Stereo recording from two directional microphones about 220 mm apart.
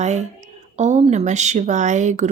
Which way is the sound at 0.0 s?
30° right (ahead or behind).